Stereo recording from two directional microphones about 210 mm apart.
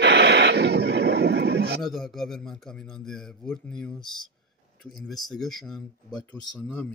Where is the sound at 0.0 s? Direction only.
55° right (ahead or behind).